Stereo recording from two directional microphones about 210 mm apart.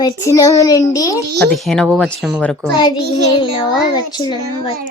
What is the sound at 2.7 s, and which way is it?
A child's voice, 20° left (ahead or behind).